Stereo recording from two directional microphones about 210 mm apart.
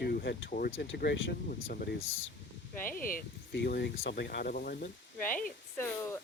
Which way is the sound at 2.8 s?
40° left (ahead or behind).